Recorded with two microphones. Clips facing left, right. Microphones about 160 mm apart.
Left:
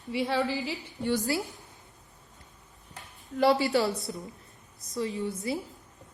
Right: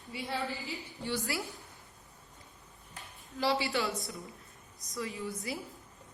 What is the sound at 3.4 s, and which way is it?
Speech, 55° left (ahead or behind).